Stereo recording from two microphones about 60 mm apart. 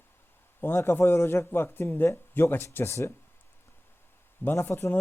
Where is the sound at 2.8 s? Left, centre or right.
Left.